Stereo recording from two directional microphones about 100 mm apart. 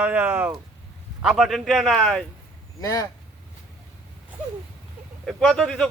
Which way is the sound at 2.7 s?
40° left (ahead or behind).